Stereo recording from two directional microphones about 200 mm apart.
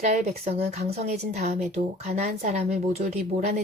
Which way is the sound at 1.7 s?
35° right (ahead or behind).